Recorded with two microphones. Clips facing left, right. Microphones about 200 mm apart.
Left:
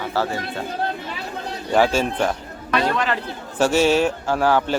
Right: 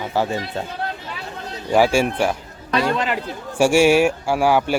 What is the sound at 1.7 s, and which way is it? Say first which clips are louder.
A man's voice: right 2 dB; 10° right (ahead or behind).